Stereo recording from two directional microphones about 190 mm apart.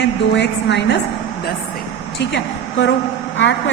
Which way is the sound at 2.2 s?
70° left (ahead or behind).